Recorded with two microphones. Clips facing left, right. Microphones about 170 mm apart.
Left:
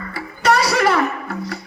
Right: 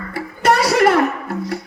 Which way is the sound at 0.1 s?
50° right (ahead or behind).